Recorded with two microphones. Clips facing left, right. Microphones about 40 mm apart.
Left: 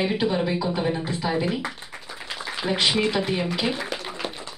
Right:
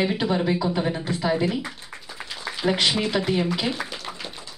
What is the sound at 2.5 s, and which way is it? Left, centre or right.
Speech, centre.